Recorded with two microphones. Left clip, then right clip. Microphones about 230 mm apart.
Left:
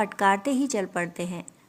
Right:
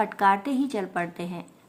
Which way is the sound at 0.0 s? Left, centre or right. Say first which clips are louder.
Right 1 dB; left.